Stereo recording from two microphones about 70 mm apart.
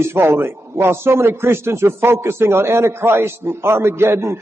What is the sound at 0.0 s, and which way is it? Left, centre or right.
A man's voice, right.